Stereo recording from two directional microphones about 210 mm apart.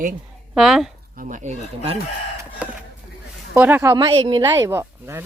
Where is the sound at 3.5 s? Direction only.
10° right (ahead or behind); by 4.4 s 25° right (ahead or behind).